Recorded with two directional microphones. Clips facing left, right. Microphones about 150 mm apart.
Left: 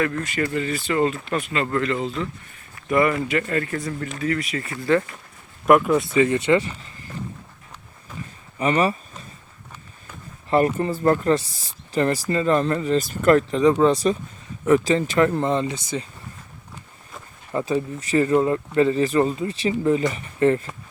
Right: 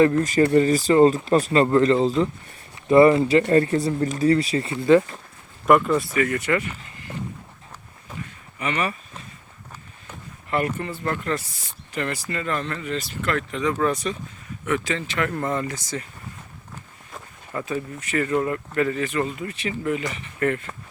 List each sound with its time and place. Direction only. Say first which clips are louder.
0.0 s speech: right 7 dB; 35° right (ahead or behind)
5.6 s speech: left 1 dB; 5° left (ahead or behind)
6.1 s speech: left 5 dB; 25° left (ahead or behind)
8.5 s speech: left 6 dB; 35° left (ahead or behind)
10.5 s speech: left 6 dB; 35° left (ahead or behind)
15.3 s speech: left 4 dB; 20° left (ahead or behind)
17.5 s speech: left 5 dB; 25° left (ahead or behind)